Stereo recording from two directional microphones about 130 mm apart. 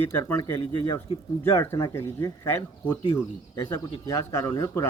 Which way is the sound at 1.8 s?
25° left (ahead or behind).